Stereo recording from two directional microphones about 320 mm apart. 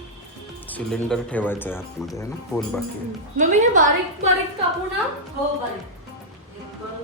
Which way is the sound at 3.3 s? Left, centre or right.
Right.